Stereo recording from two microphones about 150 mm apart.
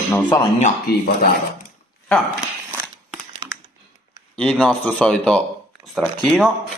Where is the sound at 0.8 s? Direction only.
90° left.